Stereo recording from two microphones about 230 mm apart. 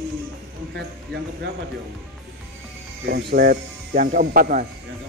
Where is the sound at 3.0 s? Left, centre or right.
Right.